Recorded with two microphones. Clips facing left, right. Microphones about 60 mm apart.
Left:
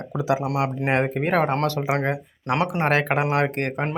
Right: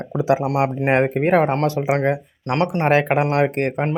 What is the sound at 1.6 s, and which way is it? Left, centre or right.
Speech, centre.